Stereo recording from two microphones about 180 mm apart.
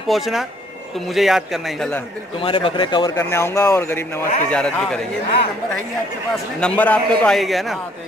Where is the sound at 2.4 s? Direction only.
30° left (ahead or behind); by 5.0 s 5° left (ahead or behind).